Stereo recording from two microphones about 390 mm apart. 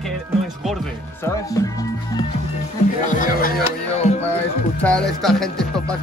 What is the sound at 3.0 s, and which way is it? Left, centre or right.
Music, left.